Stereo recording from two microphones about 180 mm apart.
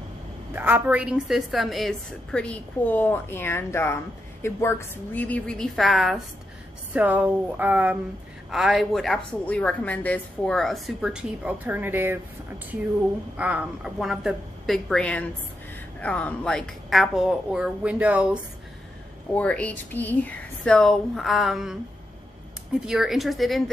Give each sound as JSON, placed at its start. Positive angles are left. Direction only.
{"t": 0.5, "sound": "a woman's voice", "side_deg": -10}
{"t": 13.4, "sound": "a woman's voice", "side_deg": -5}
{"t": 19.3, "sound": "a woman's voice", "side_deg": 5}